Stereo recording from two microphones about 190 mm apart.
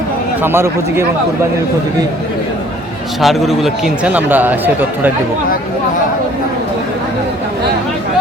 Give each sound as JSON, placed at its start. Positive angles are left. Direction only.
{"t": 0.4, "sound": "speech", "side_deg": -10}
{"t": 3.2, "sound": "speech", "side_deg": 0}